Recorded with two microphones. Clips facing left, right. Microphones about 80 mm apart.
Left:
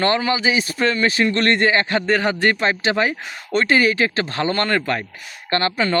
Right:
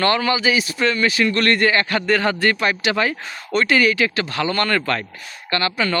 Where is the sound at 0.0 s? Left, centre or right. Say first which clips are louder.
Even; left.